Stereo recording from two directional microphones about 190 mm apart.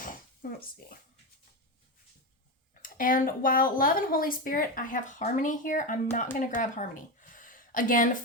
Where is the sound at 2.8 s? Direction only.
45° left (ahead or behind).